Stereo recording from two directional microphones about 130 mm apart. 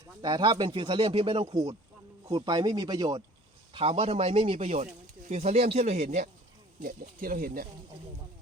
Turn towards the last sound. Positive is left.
turn(degrees=-90)